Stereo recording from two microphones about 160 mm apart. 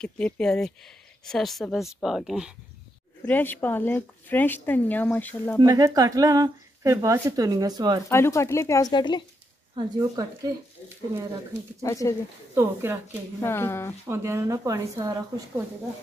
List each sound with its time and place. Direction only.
0.0 s a woman's voice: 5° left (ahead or behind)
3.3 s speech: 10° left (ahead or behind)
5.6 s speech: 25° right (ahead or behind)
8.1 s speech: 15° left (ahead or behind)
9.8 s speech: 25° right (ahead or behind)
11.8 s speech: 20° left (ahead or behind)
12.5 s speech: 15° right (ahead or behind)
13.4 s speech: 15° left (ahead or behind)
14.0 s speech: 15° right (ahead or behind)